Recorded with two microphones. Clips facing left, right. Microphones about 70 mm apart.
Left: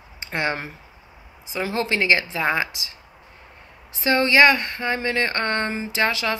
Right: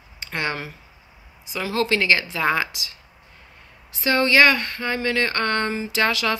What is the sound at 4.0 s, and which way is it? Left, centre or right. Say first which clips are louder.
Speech: left 1 dB; centre.